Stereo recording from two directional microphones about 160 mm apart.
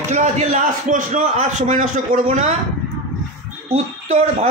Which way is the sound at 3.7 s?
45° right (ahead or behind).